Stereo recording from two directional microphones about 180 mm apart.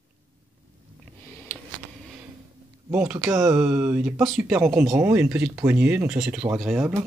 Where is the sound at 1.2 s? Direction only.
10° left (ahead or behind).